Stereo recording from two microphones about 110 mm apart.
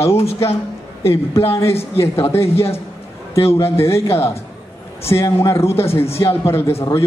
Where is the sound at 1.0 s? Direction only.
25° left (ahead or behind).